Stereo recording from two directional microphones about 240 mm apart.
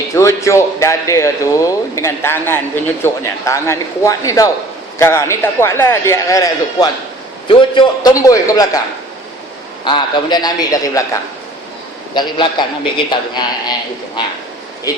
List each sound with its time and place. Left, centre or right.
0.2 s a man's voice: centre
9.8 s a man's voice: centre
12.1 s a man's voice: centre
14.9 s speech: centre